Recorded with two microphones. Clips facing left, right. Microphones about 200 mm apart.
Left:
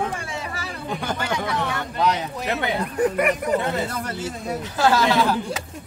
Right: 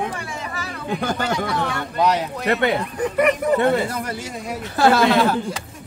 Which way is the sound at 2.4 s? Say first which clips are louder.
Right 6 dB; 65° right (ahead or behind).